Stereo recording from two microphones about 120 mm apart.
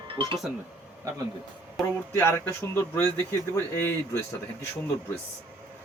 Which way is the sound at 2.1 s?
15° left (ahead or behind).